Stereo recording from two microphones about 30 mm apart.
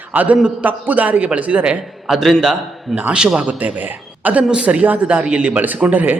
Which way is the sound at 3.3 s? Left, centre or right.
Right.